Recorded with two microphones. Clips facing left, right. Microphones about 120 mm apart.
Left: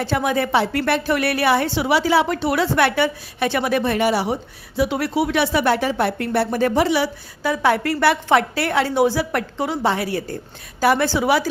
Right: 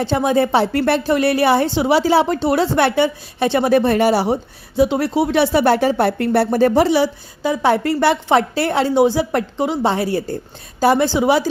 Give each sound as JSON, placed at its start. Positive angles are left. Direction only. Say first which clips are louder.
{"t": 0.0, "sound": "speech", "louder": "right 4 dB", "side_deg": -25}
{"t": 4.8, "sound": "speech", "louder": "right 4 dB", "side_deg": -25}